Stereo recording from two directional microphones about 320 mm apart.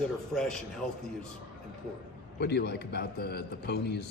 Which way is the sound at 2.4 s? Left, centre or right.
Left.